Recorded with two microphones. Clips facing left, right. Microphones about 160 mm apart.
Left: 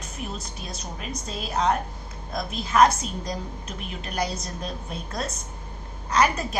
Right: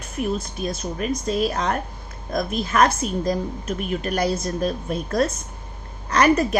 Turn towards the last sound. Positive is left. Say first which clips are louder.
# right 5 dB
turn(degrees=-65)  # may be behind; listen again after turning